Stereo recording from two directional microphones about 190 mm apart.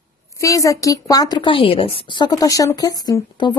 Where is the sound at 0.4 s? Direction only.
15° left (ahead or behind).